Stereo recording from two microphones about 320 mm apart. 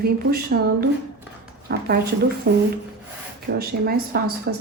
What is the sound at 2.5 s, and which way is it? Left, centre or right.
A woman's voice, right.